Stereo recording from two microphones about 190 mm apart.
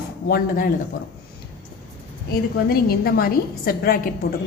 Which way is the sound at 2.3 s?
55° left (ahead or behind).